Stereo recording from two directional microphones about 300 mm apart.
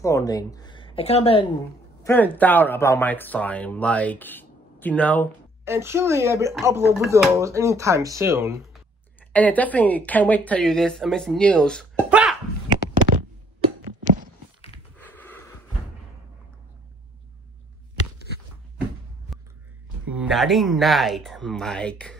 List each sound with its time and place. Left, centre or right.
0.0 s speech: centre
2.0 s speech: centre
5.7 s speech: centre
9.3 s speech: centre
13.1 s a sound: right
15.0 s a sound: centre
20.2 s speech: centre